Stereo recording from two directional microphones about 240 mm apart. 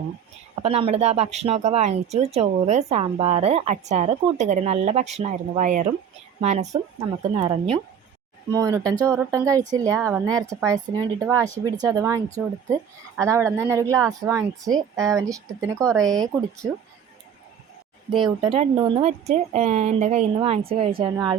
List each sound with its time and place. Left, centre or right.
0.6 s speech: right
18.1 s speech: right